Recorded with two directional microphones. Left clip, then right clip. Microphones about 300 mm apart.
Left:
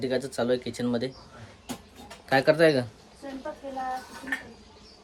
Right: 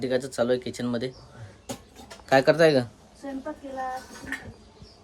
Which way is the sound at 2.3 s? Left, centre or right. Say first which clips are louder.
Right 2 dB; centre.